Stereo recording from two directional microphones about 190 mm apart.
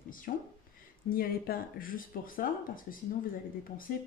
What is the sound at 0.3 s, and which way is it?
Speech, 50° left (ahead or behind).